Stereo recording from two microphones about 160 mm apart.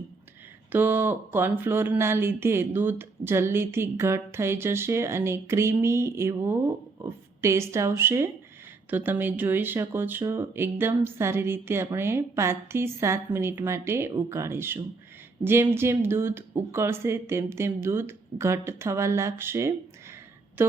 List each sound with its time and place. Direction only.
0.7 s speech: 10° right (ahead or behind)